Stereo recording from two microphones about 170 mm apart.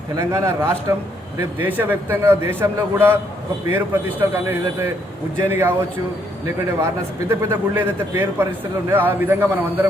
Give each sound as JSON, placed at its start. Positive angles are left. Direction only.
{"t": 0.2, "sound": "a man's voice", "side_deg": -15}
{"t": 7.3, "sound": "a man's voice", "side_deg": -15}